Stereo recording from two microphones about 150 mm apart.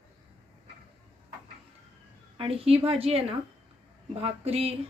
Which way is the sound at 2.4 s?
40° right (ahead or behind).